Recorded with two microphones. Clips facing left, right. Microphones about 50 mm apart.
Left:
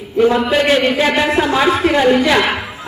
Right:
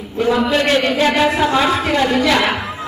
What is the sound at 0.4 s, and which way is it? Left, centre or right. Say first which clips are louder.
A man's voice: left 2 dB; centre.